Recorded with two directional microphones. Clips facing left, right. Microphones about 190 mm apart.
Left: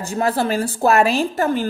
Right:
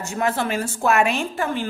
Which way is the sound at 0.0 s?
35° left (ahead or behind).